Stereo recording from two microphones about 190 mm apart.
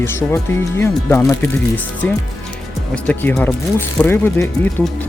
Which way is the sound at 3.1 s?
10° left (ahead or behind).